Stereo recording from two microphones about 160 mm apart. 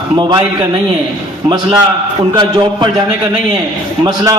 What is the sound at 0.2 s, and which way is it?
Speech, 25° right (ahead or behind).